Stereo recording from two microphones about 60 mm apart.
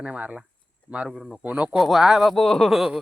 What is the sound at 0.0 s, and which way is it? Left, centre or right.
Speech, centre.